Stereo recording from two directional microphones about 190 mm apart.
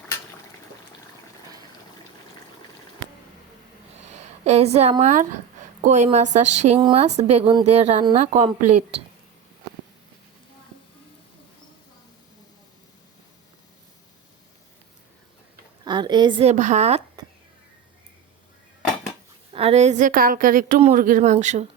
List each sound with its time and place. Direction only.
4.1 s a woman's voice: 35° right (ahead or behind)
15.8 s a woman's voice: 25° right (ahead or behind)
19.5 s a woman's voice: 35° right (ahead or behind)